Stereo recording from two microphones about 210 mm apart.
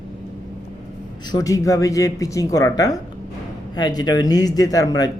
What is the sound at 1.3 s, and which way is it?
Speech, 15° left (ahead or behind).